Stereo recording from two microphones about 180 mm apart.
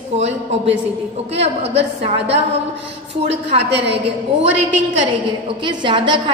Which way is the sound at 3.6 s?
70° right (ahead or behind).